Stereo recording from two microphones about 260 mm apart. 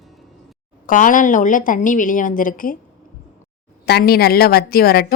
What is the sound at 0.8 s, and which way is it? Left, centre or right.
A woman's voice, left.